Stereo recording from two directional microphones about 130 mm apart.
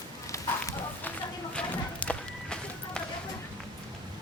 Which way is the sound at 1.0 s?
10° left (ahead or behind).